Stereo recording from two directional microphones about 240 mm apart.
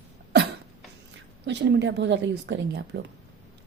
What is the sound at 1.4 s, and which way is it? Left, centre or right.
A woman's voice, right.